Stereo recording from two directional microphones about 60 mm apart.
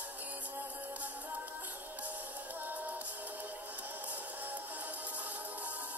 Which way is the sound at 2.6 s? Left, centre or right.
Right.